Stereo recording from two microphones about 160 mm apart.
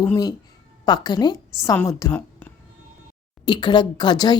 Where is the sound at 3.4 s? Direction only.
30° left (ahead or behind).